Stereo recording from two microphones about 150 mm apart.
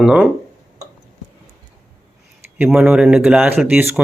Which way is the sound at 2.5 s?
10° right (ahead or behind).